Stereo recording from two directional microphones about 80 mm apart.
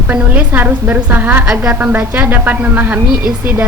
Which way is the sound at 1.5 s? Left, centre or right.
Centre.